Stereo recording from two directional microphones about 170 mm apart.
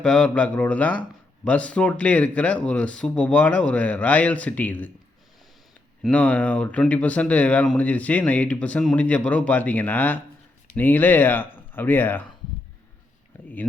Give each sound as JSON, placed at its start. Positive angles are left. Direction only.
{"t": 0.0, "sound": "speech", "side_deg": 5}
{"t": 6.0, "sound": "speech", "side_deg": 5}